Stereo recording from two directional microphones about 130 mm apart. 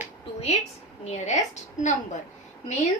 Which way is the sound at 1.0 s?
60° left (ahead or behind).